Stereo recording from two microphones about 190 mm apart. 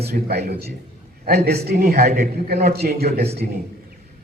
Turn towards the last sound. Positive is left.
turn(degrees=-55)  # may be behind; listen again after turning